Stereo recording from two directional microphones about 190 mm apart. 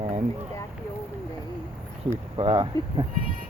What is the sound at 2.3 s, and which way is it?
Speech, 30° right (ahead or behind).